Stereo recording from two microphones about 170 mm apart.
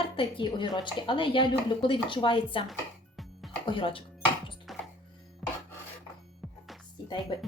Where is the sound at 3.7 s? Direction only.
30° left (ahead or behind).